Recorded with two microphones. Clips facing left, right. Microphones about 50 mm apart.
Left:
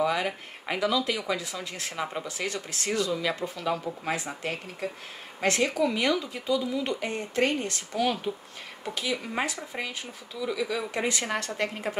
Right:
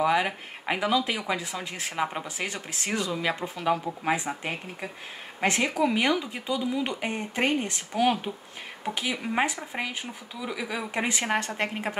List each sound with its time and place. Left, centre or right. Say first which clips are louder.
0.0 s speech: right 3 dB; right